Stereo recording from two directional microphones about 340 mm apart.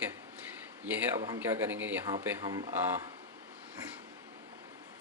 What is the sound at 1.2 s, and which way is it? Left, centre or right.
Speech, centre.